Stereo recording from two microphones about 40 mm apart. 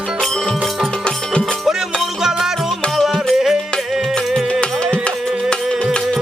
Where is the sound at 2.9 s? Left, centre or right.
Centre.